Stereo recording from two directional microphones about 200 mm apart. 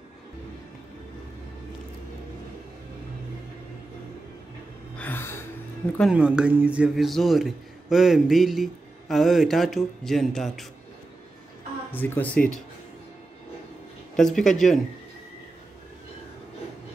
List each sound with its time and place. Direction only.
4.9 s a sound: 10° left (ahead or behind)
5.9 s a man's voice: 5° right (ahead or behind)
11.9 s speech: 10° left (ahead or behind)
14.1 s a man's voice: centre (ahead or behind)